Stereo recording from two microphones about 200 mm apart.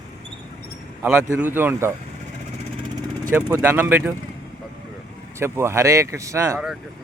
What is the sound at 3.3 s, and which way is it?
Speech, 10° right (ahead or behind).